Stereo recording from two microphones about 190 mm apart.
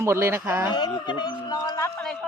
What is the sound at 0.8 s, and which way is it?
Speech, 25° left (ahead or behind).